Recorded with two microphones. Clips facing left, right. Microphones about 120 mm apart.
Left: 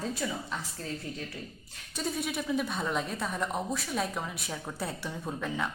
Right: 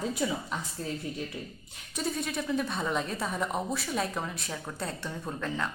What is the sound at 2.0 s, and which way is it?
Speech, centre (ahead or behind).